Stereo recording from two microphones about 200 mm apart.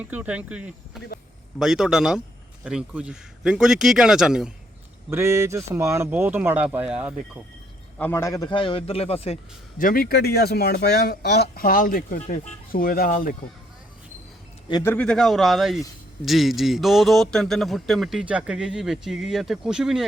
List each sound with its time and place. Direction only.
0.0 s a man's voice: 5° right (ahead or behind)
5.1 s speech: 15° right (ahead or behind)
7.9 s a man's voice: 10° left (ahead or behind); by 9.8 s 30° left (ahead or behind)
9.8 s speech: 45° left (ahead or behind)
14.7 s a man's voice: 15° left (ahead or behind); by 20.1 s centre (ahead or behind)